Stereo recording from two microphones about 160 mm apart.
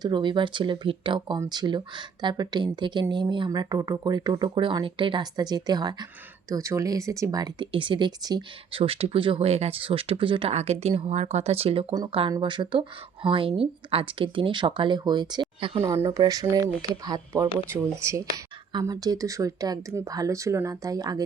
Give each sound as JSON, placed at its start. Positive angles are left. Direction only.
{"t": 0.0, "sound": "speech", "side_deg": -30}
{"t": 15.8, "sound": "speech", "side_deg": -20}